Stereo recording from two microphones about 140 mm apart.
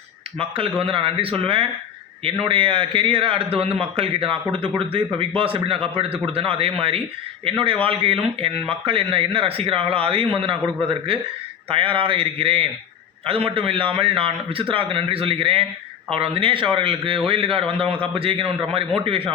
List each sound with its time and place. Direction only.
0.3 s a man's voice: 40° right (ahead or behind)